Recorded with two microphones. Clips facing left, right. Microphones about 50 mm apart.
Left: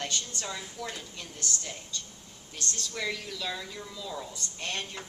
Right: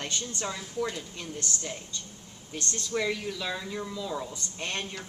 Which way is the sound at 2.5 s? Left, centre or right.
Right.